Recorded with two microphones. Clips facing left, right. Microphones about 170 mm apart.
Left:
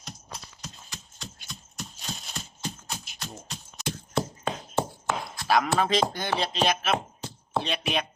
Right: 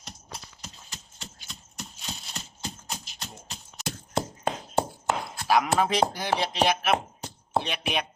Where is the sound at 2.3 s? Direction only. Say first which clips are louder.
Left 2 dB; 20° right (ahead or behind).